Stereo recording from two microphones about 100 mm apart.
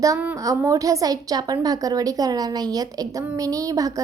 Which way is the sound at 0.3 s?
30° right (ahead or behind).